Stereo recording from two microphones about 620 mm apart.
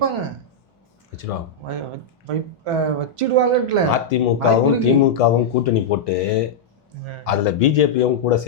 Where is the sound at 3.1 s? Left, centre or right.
Right.